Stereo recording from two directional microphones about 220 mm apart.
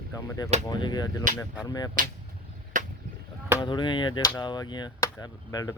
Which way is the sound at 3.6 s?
20° left (ahead or behind).